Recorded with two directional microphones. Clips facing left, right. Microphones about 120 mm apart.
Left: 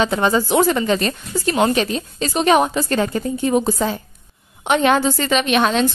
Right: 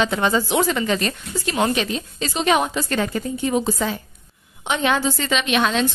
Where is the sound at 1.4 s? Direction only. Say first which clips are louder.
Left 4 dB; 45° left (ahead or behind).